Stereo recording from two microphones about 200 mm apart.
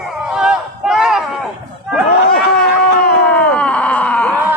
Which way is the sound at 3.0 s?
5° left (ahead or behind).